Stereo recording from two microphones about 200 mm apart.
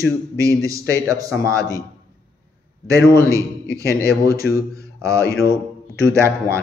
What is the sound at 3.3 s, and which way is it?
Speech, 15° right (ahead or behind).